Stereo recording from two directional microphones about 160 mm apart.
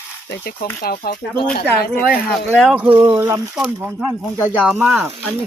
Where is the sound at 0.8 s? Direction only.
65° left (ahead or behind).